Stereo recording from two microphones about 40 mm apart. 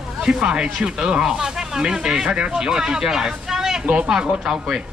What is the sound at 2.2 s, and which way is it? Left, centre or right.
Speech, right.